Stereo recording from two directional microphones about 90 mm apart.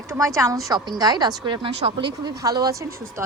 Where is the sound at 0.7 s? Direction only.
45° right (ahead or behind).